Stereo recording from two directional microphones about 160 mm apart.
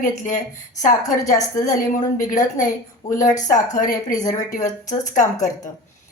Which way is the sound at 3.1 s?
50° left (ahead or behind).